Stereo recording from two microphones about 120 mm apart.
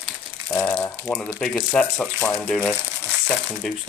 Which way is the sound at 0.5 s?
15° left (ahead or behind).